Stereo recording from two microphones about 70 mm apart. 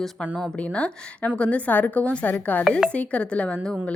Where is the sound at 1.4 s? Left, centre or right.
Centre.